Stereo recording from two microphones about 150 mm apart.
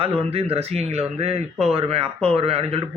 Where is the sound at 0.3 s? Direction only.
40° right (ahead or behind).